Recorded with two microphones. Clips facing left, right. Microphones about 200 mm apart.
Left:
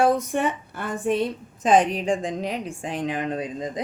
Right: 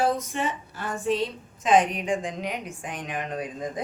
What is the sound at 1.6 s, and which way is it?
A woman's voice, 35° left (ahead or behind).